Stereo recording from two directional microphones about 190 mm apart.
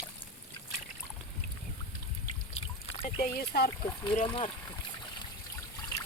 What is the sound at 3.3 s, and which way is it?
Speech, 55° left (ahead or behind).